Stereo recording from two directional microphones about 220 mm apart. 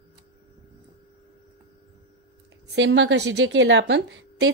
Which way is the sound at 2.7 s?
50° right (ahead or behind).